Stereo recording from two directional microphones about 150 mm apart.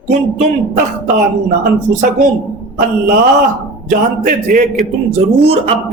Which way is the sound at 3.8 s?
65° right (ahead or behind).